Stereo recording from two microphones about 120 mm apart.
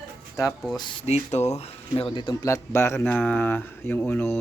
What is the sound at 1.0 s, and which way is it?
Speech, 65° left (ahead or behind).